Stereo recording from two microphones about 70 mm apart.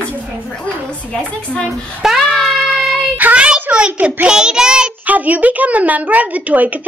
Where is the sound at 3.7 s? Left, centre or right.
Centre.